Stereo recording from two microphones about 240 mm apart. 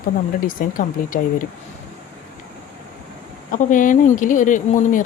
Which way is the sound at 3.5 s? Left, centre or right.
Left.